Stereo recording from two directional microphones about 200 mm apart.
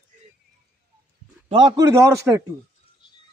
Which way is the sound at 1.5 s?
25° right (ahead or behind).